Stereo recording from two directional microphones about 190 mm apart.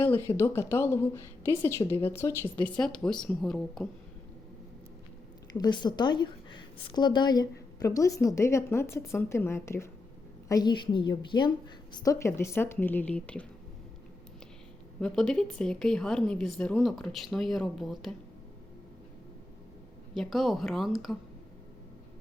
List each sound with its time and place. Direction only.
0.3 s a woman's voice: 15° left (ahead or behind)
5.5 s a woman's voice: 20° left (ahead or behind); by 13.4 s 5° left (ahead or behind)
15.0 s a woman's voice: 5° left (ahead or behind)
20.1 s a woman's voice: centre (ahead or behind)